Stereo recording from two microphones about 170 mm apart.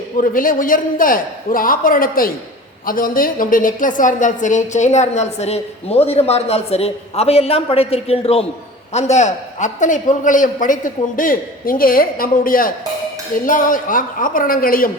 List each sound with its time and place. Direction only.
0.2 s a man's voice: 55° left (ahead or behind)